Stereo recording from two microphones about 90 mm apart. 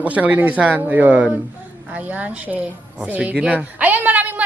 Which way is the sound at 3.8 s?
20° right (ahead or behind).